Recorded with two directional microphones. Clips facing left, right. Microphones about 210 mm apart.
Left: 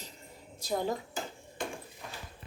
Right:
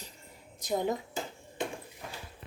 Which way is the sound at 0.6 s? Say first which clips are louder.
Right 2 dB; 20° right (ahead or behind).